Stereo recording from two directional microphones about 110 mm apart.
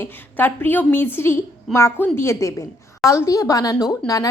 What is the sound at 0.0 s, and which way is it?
A woman's voice, 20° left (ahead or behind).